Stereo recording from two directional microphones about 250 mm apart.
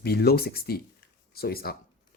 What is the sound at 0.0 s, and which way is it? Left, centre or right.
Speech, left.